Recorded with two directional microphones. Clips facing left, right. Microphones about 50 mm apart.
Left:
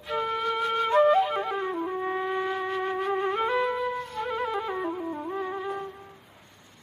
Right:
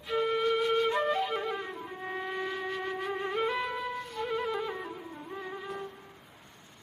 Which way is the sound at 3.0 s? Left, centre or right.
Left.